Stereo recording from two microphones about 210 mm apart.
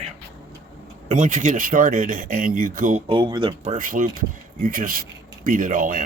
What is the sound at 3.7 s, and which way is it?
Speech, 40° right (ahead or behind).